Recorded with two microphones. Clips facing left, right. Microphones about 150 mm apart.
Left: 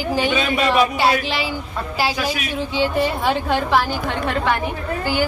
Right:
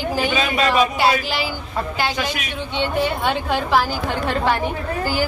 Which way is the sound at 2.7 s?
Centre (ahead or behind).